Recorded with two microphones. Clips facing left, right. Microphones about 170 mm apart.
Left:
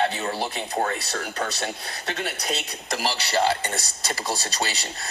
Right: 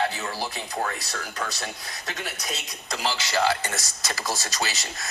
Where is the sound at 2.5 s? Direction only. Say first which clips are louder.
Left 5 dB; 65° left (ahead or behind).